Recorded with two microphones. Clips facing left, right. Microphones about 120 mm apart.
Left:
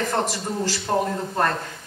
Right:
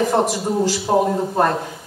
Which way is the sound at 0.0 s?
10° right (ahead or behind).